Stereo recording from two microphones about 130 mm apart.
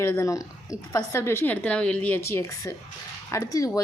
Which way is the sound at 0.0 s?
20° left (ahead or behind).